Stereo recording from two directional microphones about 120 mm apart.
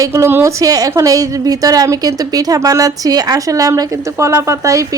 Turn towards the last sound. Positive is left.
turn(degrees=-25)  # may be behind; listen again after turning